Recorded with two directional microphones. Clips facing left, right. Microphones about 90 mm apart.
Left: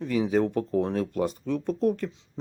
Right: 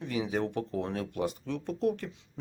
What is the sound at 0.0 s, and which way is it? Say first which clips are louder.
Speech: left 7 dB; 40° left (ahead or behind).